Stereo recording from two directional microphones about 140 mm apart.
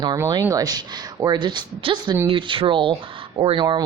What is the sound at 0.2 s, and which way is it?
Speech, 25° right (ahead or behind).